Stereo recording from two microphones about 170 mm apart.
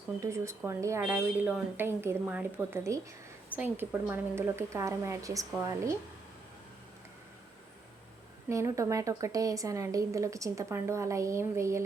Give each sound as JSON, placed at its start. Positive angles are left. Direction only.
{"t": 0.2, "sound": "a woman's voice", "side_deg": -15}
{"t": 8.4, "sound": "a woman's voice", "side_deg": -15}